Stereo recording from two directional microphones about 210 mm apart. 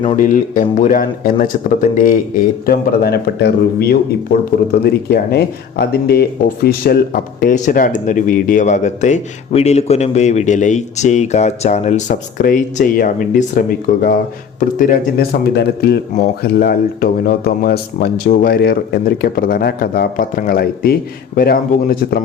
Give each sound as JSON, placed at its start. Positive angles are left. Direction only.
{"t": 0.2, "sound": "speech", "side_deg": 40}